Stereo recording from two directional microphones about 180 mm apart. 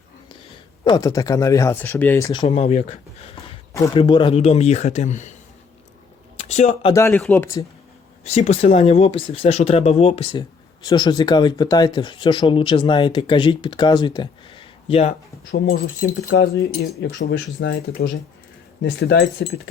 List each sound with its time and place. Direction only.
0.9 s speech: 20° left (ahead or behind)
2.5 s speech: 35° left (ahead or behind)
6.3 s a sound: 35° left (ahead or behind)
6.9 s speech: 15° left (ahead or behind)
8.2 s speech: 35° left (ahead or behind)
15.5 s speech: 60° left (ahead or behind)